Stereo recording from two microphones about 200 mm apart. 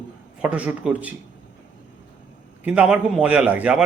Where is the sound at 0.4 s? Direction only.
5° right (ahead or behind).